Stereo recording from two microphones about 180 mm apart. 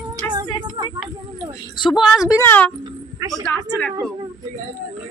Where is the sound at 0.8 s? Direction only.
25° right (ahead or behind).